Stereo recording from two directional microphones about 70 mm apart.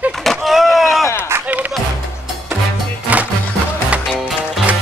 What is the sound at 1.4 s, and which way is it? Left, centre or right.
Music, right.